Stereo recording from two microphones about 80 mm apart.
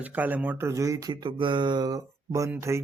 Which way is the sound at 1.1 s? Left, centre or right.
Right.